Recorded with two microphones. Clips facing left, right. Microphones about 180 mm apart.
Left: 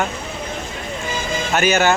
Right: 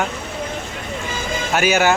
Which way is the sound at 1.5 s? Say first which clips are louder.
Even; 10° right (ahead or behind).